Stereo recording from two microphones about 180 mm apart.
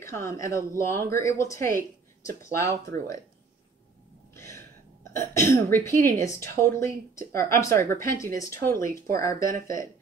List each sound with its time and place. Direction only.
0.0 s speech: 15° left (ahead or behind)
4.3 s gasp: 15° left (ahead or behind)
5.1 s speech: 15° left (ahead or behind)